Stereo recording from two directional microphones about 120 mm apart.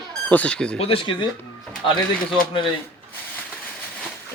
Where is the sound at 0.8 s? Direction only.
50° left (ahead or behind).